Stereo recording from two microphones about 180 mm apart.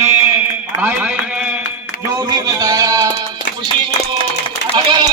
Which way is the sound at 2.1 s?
20° right (ahead or behind).